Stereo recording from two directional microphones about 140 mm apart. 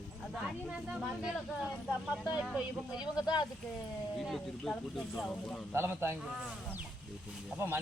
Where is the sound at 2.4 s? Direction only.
5° right (ahead or behind).